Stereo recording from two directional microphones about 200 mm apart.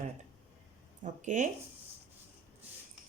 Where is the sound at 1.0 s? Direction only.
40° right (ahead or behind).